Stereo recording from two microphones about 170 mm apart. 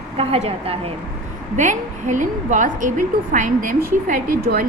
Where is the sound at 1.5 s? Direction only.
45° right (ahead or behind).